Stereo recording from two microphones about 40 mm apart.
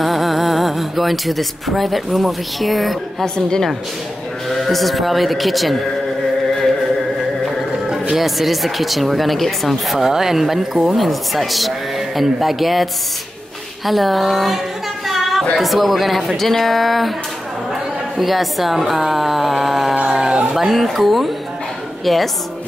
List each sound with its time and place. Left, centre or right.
0.0 s speech: centre
3.3 s a woman's voice: centre
4.5 s speech: centre
8.1 s speech: centre
9.9 s speech: centre
13.8 s speech: centre
18.1 s a woman's voice: centre
20.1 s a sound: centre
20.5 s a woman's voice: centre